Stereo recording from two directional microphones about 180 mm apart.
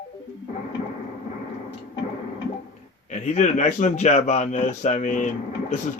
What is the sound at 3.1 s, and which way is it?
A man's voice, 40° left (ahead or behind).